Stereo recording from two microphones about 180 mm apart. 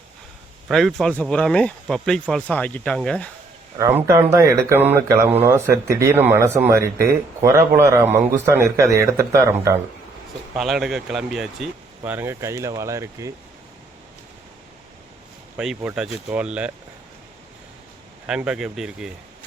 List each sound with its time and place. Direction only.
0.7 s speech: centre (ahead or behind)
3.8 s speech: 15° right (ahead or behind)
10.6 s speech: centre (ahead or behind)
15.5 s speech: 5° right (ahead or behind)
18.3 s speech: 5° right (ahead or behind)